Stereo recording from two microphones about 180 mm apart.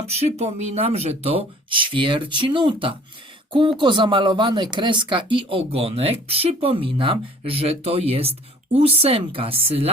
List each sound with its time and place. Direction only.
0.1 s speech: 35° right (ahead or behind)